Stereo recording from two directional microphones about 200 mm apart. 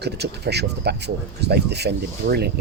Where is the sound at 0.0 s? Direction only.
55° right (ahead or behind).